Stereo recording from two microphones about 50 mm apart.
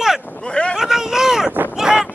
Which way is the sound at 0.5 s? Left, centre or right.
Left.